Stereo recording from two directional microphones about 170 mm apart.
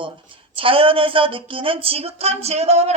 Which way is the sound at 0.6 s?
30° right (ahead or behind).